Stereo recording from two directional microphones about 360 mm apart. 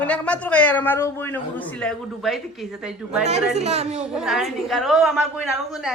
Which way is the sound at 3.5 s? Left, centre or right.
Centre.